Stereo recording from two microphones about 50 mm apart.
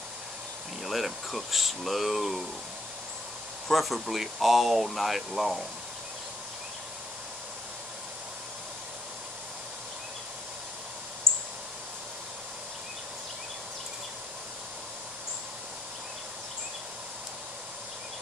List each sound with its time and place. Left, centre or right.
0.8 s speech: centre
3.6 s speech: centre
11.3 s a sound: right